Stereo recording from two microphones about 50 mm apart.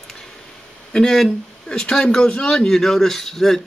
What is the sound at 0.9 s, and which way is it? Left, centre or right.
Speech, centre.